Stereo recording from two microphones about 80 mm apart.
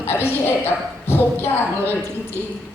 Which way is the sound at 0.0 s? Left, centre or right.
Left.